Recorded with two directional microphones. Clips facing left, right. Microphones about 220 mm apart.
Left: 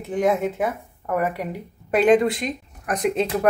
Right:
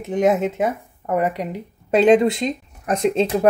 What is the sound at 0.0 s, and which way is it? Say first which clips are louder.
Speech: right 3 dB; 20° right (ahead or behind).